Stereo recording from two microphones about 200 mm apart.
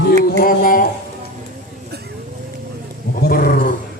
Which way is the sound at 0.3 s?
45° left (ahead or behind).